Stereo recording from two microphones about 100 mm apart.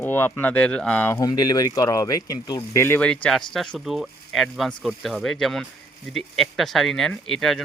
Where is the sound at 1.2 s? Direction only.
40° left (ahead or behind).